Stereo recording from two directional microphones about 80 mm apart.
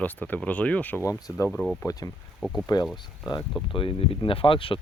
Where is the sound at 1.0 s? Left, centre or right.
Left.